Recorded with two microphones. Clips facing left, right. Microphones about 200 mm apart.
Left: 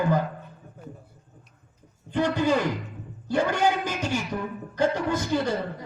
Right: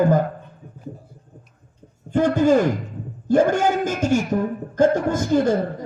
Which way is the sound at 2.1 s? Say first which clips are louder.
Right 7 dB; 45° right (ahead or behind).